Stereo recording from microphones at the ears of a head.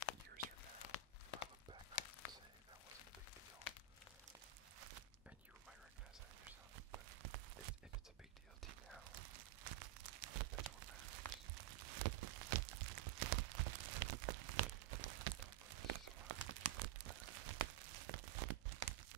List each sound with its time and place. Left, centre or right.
0.8 s tearing: left
6.7 s a sound: right
8.6 s tearing: right